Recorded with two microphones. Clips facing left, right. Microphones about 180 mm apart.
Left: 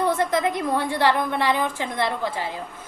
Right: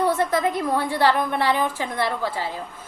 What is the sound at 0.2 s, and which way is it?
A woman's voice, 20° left (ahead or behind).